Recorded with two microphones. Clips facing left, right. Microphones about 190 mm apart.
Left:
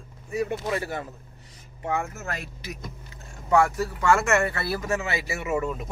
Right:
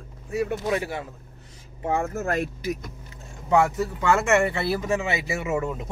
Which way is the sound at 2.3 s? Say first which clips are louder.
Right 9 dB; 50° right (ahead or behind).